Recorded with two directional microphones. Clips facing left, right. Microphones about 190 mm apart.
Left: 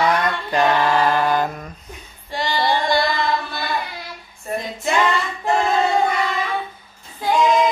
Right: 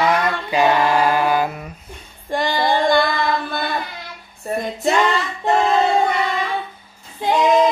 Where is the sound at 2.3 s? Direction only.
50° right (ahead or behind).